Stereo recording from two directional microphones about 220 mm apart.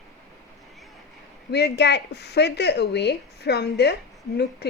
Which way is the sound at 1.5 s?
50° left (ahead or behind).